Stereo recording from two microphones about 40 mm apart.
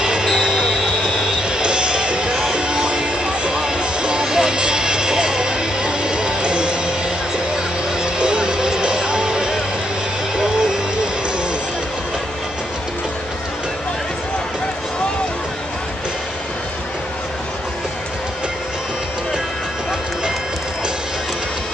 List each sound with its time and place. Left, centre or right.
0.0 s music: centre
8.0 s music: right